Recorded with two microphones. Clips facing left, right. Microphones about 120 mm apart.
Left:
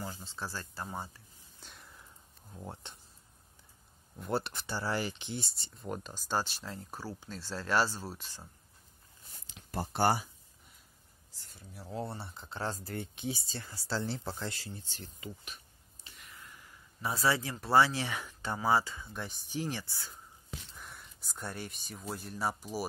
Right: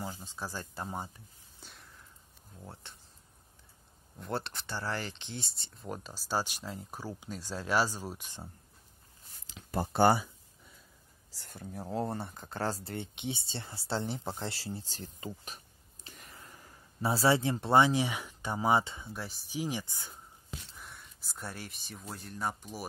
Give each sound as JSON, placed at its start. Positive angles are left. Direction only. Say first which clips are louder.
{"t": 0.0, "sound": "speech", "louder": "right 1 dB", "side_deg": -15}
{"t": 1.6, "sound": "a sound", "louder": "even", "side_deg": 0}
{"t": 2.6, "sound": "speech", "louder": "left 4 dB", "side_deg": 20}
{"t": 4.2, "sound": "speech", "louder": "left 2 dB", "side_deg": 5}
{"t": 9.5, "sound": "a sound", "louder": "right 6 dB", "side_deg": -90}
{"t": 11.3, "sound": "speech", "louder": "right 9 dB", "side_deg": -55}
{"t": 12.8, "sound": "speech", "louder": "even", "side_deg": -25}
{"t": 16.2, "sound": "a sound", "louder": "even", "side_deg": -35}
{"t": 18.4, "sound": "speech", "louder": "right 1 dB", "side_deg": -15}
{"t": 19.1, "sound": "speech", "louder": "even", "side_deg": -5}
{"t": 20.7, "sound": "speech", "louder": "even", "side_deg": 0}